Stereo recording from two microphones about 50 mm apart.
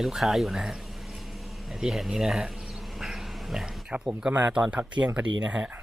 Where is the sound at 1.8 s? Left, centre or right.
Centre.